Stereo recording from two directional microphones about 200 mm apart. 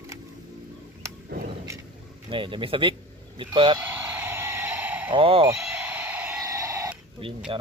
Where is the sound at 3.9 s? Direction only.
10° right (ahead or behind).